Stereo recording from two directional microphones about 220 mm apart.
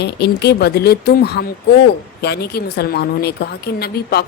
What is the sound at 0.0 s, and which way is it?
A woman's voice, 50° left (ahead or behind).